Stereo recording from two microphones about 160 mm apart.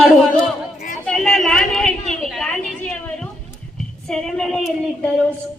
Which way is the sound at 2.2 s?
Centre (ahead or behind).